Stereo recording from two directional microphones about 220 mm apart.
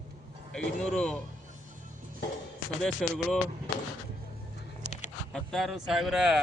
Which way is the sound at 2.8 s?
Centre (ahead or behind).